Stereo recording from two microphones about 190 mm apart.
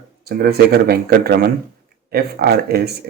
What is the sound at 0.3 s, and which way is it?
Speech, 55° right (ahead or behind).